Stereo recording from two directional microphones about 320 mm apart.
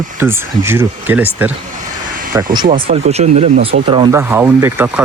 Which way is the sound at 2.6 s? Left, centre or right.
Right.